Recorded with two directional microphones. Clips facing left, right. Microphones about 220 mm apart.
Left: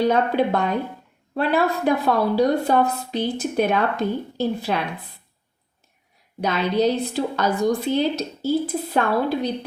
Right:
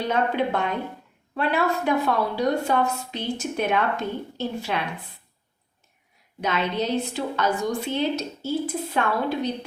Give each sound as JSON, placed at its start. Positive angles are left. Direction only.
{"t": 0.0, "sound": "a woman's voice", "side_deg": 35}
{"t": 6.4, "sound": "a woman's voice", "side_deg": 35}